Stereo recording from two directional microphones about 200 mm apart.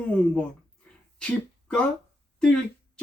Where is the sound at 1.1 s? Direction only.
5° left (ahead or behind).